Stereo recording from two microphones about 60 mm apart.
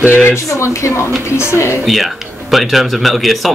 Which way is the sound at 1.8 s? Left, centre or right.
Centre.